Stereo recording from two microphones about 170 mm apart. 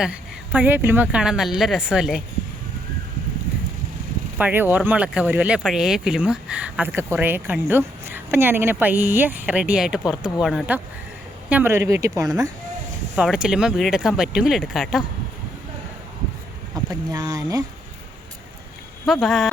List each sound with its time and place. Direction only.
0.0 s a woman's voice: 10° right (ahead or behind)
4.4 s a woman's voice: 10° right (ahead or behind)
13.1 s a woman's voice: 5° right (ahead or behind)
16.7 s speech: 20° right (ahead or behind)
19.0 s a woman's voice: centre (ahead or behind)